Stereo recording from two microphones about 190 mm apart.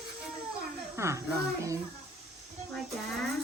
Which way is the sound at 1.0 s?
15° right (ahead or behind).